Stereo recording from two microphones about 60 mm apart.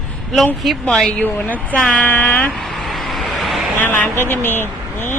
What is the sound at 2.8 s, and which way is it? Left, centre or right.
Vehicle, centre.